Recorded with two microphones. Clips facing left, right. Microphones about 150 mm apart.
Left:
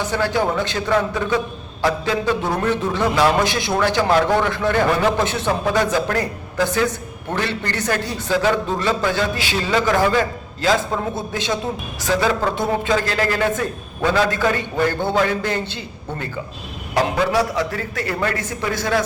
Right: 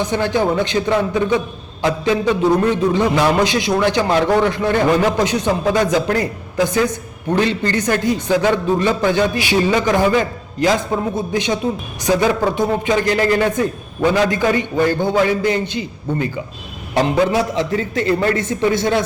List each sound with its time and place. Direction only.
0.0 s a man's voice: 20° right (ahead or behind)
12.0 s a man's voice: 20° right (ahead or behind)